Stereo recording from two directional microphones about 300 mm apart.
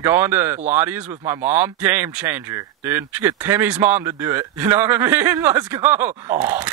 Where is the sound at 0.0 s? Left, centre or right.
Centre.